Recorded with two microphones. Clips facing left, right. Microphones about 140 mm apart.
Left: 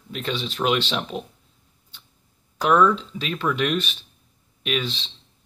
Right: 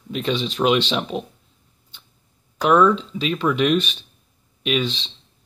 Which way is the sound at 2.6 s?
10° right (ahead or behind).